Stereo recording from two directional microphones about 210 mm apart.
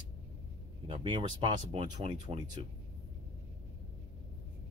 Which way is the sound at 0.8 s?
25° right (ahead or behind).